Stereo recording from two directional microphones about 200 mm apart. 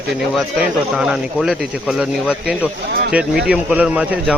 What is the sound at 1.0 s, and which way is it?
Speech, centre (ahead or behind).